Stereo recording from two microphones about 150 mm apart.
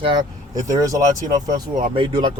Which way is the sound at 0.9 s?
25° right (ahead or behind).